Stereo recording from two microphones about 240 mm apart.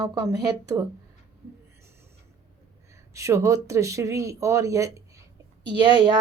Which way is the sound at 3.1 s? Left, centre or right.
Centre.